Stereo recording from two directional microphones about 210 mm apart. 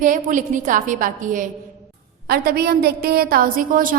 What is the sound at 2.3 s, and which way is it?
A woman's voice, 50° right (ahead or behind).